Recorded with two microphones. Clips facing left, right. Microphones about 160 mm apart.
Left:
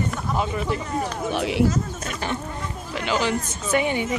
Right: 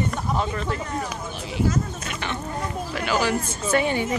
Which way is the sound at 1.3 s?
70° left (ahead or behind).